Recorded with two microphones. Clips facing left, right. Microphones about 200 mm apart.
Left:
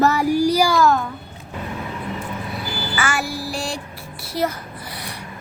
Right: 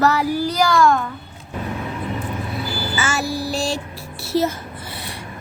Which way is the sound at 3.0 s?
25° right (ahead or behind).